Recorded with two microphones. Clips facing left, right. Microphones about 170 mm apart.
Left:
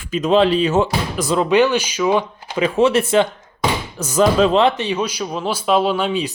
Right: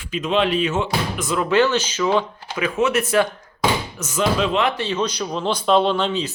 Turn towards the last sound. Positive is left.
turn(degrees=10)  # may be behind; listen again after turning